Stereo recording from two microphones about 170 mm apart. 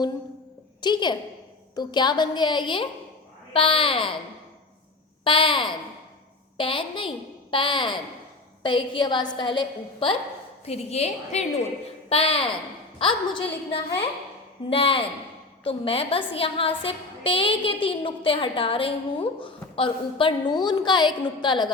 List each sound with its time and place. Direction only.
0.8 s a woman's voice: 25° left (ahead or behind)
5.2 s a woman's voice: 30° left (ahead or behind)